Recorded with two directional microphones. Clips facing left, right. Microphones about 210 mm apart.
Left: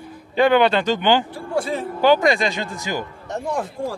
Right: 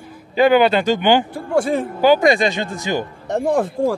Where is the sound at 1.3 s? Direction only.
50° right (ahead or behind).